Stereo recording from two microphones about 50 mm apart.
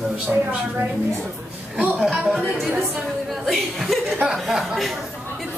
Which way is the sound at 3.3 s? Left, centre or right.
Centre.